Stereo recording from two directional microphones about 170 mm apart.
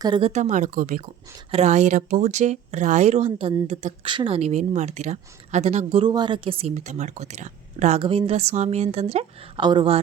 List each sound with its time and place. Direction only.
0.0 s speech: 30° right (ahead or behind); by 1.0 s 50° right (ahead or behind)
1.5 s a woman's voice: 40° right (ahead or behind)